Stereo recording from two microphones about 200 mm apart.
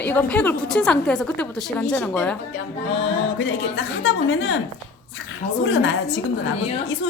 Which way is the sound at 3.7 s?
80° left.